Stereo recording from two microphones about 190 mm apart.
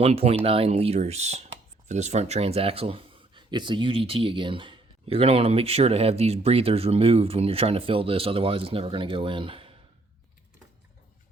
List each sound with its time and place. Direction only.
0.0 s speech: 30° right (ahead or behind)